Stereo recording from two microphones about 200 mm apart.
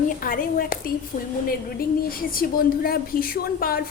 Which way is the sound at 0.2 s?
45° left (ahead or behind).